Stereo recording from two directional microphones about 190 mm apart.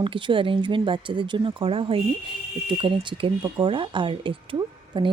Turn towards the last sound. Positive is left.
turn(degrees=-25)  # may be behind; listen again after turning